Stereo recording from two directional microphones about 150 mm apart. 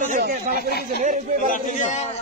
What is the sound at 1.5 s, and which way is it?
Speech, 55° left (ahead or behind).